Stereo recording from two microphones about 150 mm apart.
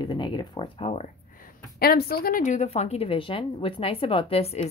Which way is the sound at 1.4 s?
90° left.